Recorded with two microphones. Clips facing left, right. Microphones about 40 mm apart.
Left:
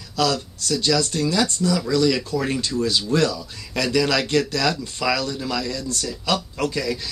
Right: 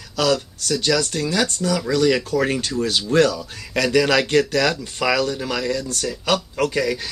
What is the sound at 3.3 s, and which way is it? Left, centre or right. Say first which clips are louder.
Speech: right 3 dB; right.